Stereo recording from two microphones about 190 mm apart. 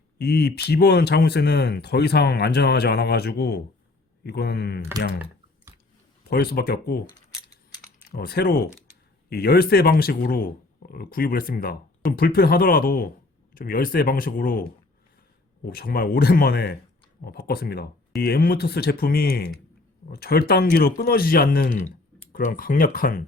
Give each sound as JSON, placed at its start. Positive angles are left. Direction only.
{"t": 0.2, "sound": "speech", "side_deg": 60}
{"t": 6.3, "sound": "speech", "side_deg": 55}
{"t": 8.1, "sound": "speech", "side_deg": 55}